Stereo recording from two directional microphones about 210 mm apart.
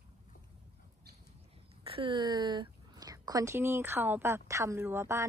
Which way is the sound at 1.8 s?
25° right (ahead or behind).